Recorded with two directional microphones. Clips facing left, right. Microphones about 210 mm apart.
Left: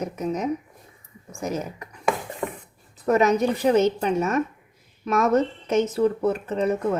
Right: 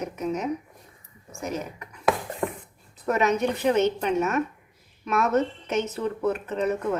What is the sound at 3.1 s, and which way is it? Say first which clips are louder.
A woman's voice: left 4 dB; 35° left (ahead or behind).